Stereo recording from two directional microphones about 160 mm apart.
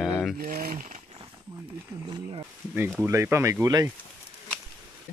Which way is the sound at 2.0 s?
30° right (ahead or behind).